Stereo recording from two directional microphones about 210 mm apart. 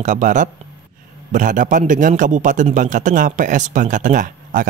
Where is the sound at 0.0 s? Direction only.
35° right (ahead or behind).